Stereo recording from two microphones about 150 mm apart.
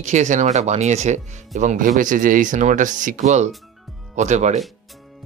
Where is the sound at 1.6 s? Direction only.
60° right (ahead or behind).